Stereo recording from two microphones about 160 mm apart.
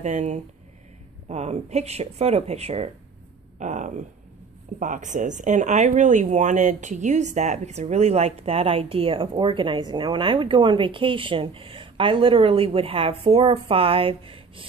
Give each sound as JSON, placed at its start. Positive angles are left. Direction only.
{"t": 0.0, "sound": "speech", "side_deg": -45}
{"t": 3.5, "sound": "speech", "side_deg": -50}